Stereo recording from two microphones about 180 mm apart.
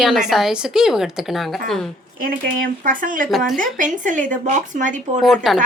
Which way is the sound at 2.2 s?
50° right (ahead or behind).